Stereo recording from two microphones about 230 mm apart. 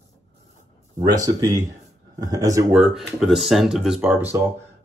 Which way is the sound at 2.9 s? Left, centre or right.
Centre.